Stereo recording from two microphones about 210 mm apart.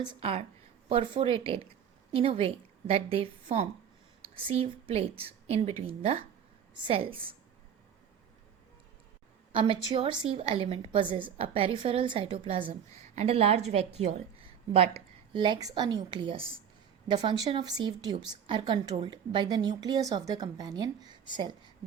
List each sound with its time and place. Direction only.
0.0 s a woman's voice: 25° right (ahead or behind)
9.5 s a woman's voice: 25° right (ahead or behind)